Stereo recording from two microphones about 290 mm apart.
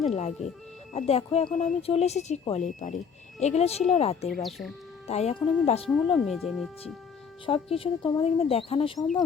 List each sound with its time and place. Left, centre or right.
0.1 s speech: left
4.4 s speech: centre
5.0 s speech: left
5.9 s speech: centre
7.4 s speech: centre